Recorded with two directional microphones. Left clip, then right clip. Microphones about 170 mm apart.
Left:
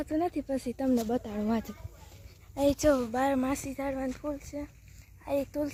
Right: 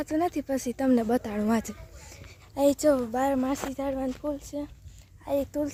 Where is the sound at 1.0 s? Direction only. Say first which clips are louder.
Right 5 dB; 20° right (ahead or behind).